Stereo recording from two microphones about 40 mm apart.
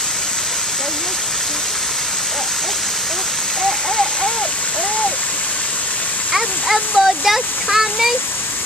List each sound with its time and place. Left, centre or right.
3.6 s rain: centre
6.3 s a child's voice: centre